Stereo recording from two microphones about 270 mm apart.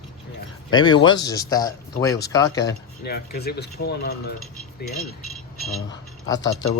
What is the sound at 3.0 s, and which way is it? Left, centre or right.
Speech, left.